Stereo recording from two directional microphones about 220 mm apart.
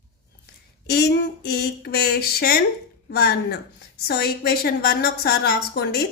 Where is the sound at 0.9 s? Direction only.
50° left (ahead or behind).